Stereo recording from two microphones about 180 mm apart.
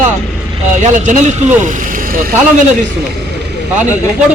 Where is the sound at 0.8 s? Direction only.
40° right (ahead or behind).